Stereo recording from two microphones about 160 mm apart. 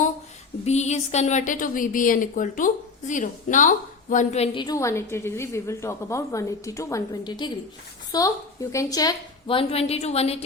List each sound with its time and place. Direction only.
0.6 s a woman's voice: 45° left (ahead or behind)
4.5 s a woman's voice: 25° left (ahead or behind)
9.5 s a woman's voice: 35° left (ahead or behind)